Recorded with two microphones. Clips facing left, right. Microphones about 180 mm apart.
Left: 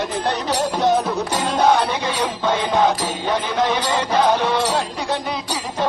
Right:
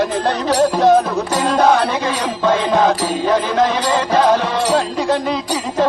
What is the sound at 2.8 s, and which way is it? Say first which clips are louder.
Music: right 4 dB; 90° right.